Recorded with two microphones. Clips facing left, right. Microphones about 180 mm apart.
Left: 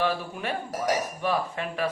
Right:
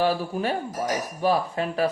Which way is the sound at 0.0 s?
35° right (ahead or behind).